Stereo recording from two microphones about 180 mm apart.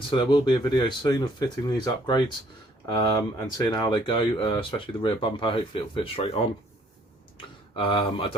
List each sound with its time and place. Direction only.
0.1 s speech: 30° left (ahead or behind)